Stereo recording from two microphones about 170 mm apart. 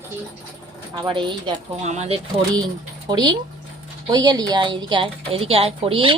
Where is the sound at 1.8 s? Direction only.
40° right (ahead or behind).